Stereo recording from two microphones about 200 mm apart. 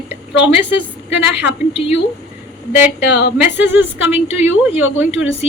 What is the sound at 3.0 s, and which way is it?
Speech, 55° left (ahead or behind).